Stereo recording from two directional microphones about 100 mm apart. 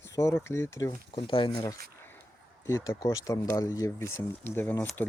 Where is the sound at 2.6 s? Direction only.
25° left (ahead or behind).